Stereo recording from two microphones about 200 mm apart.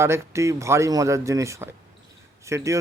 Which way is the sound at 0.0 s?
15° right (ahead or behind).